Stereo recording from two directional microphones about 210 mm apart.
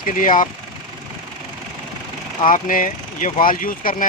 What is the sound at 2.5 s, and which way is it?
Speech, 40° left (ahead or behind).